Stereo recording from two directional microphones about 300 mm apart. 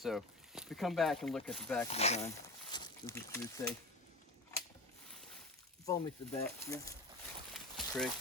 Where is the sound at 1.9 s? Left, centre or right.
Left.